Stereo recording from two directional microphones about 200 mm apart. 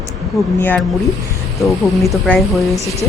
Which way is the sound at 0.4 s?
Centre (ahead or behind).